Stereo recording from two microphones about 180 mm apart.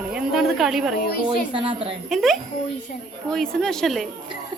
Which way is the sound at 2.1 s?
Centre (ahead or behind).